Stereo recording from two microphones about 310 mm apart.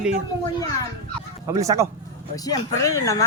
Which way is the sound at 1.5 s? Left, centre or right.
Centre.